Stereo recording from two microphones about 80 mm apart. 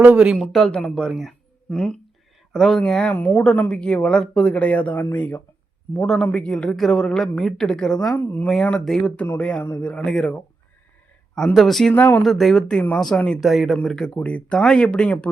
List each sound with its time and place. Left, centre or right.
0.0 s speech: centre
0.3 s speech: centre
3.2 s speech: left
8.1 s speech: left
8.8 s speech: centre
11.5 s speech: centre
11.9 s speech: left
12.2 s speech: centre
13.4 s speech: centre
14.2 s speech: centre